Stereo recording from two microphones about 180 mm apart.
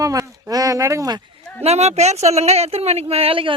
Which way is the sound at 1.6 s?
35° right (ahead or behind).